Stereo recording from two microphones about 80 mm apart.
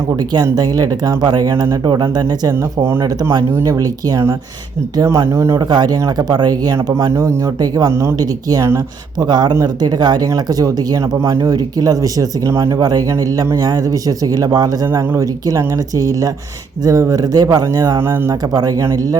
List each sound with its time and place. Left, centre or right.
0.5 s speech: right
2.5 s speech: right
3.6 s speech: right
5.0 s speech: right
5.5 s speech: right
7.1 s speech: right
8.2 s speech: right
11.2 s speech: right
12.5 s speech: right
14.3 s speech: right
17.9 s speech: right